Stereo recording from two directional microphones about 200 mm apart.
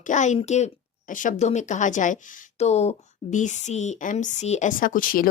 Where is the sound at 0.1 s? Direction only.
35° left (ahead or behind).